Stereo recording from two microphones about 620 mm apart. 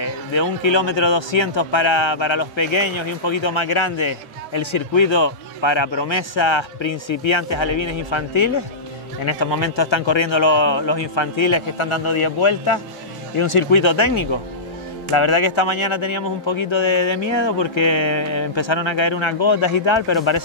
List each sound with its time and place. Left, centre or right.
0.0 s a man's voice: left